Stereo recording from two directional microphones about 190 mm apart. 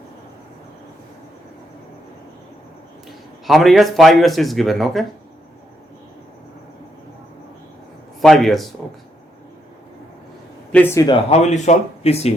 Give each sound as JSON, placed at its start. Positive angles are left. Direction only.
{"t": 3.4, "sound": "speech", "side_deg": 0}
{"t": 8.2, "sound": "speech", "side_deg": 0}
{"t": 10.7, "sound": "a man's voice", "side_deg": 5}
{"t": 11.0, "sound": "speech", "side_deg": 30}